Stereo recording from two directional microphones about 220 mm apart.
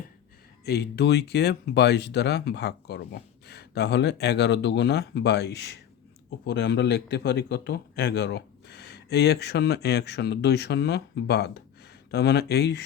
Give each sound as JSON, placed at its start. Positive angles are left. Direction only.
{"t": 0.6, "sound": "speech", "side_deg": 45}